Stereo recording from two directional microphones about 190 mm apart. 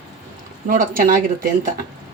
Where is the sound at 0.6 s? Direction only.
45° right (ahead or behind).